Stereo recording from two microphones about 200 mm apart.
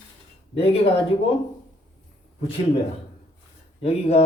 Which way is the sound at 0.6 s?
30° left (ahead or behind).